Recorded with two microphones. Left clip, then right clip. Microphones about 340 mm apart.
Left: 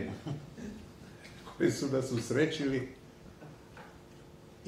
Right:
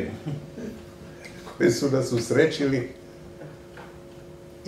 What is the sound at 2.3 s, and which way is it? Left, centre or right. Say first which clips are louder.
Speech: right 9 dB; left.